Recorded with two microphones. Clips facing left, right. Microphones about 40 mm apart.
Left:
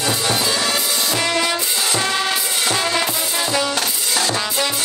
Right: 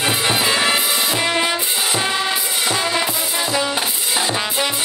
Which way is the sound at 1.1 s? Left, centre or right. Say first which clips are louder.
Left 2 dB; centre.